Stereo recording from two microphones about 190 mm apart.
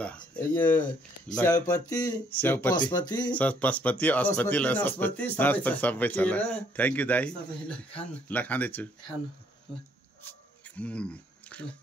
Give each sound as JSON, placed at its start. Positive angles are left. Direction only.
{"t": 0.0, "sound": "speech", "side_deg": 5}
{"t": 2.9, "sound": "speech", "side_deg": 20}
{"t": 3.3, "sound": "speech", "side_deg": 5}
{"t": 10.8, "sound": "speech", "side_deg": 5}